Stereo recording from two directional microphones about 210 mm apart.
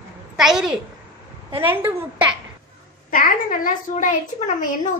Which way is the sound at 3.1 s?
40° left (ahead or behind).